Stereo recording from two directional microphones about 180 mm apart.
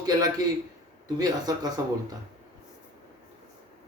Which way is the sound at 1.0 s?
20° right (ahead or behind).